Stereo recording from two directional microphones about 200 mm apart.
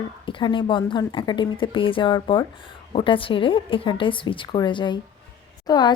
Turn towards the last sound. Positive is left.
turn(degrees=20)  # may be behind; listen again after turning